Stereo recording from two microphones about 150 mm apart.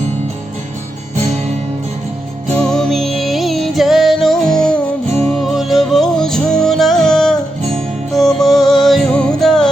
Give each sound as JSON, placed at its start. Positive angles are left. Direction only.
{"t": 2.6, "sound": "music", "side_deg": 5}